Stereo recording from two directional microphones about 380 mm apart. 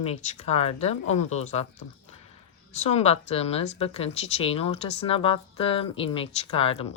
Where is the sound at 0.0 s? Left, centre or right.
Centre.